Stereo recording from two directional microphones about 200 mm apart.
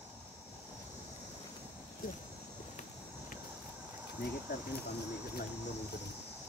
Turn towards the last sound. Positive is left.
turn(degrees=55)  # may be behind; listen again after turning